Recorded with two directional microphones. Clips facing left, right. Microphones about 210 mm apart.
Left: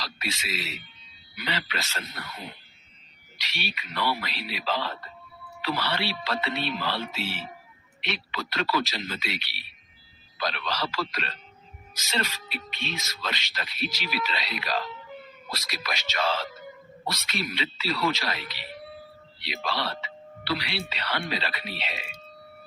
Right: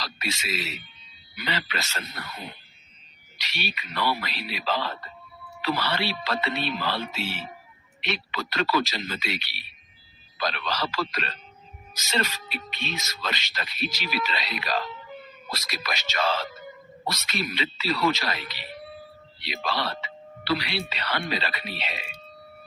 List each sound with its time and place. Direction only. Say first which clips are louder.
0.0 s speech: right 2 dB; 45° right (ahead or behind)
3.3 s speech: right 2 dB; 45° right (ahead or behind)